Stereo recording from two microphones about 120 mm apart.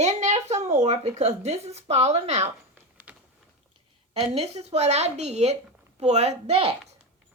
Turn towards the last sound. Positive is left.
turn(degrees=-55)  # may be behind; listen again after turning